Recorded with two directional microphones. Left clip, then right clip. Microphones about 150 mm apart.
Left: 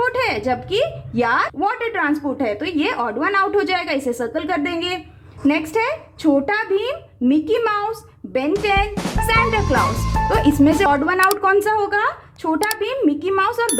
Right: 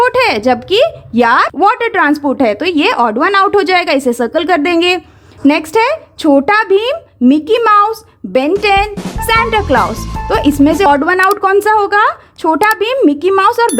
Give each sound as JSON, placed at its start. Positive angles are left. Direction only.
{"t": 0.0, "sound": "a woman's voice", "side_deg": -45}